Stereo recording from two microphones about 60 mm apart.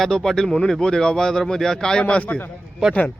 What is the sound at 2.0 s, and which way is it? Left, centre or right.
Speech, left.